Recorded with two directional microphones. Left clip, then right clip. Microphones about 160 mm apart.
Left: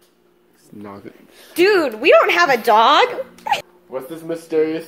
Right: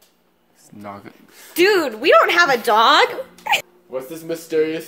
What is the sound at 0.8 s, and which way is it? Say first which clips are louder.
Speech: right 2 dB; 55° right (ahead or behind).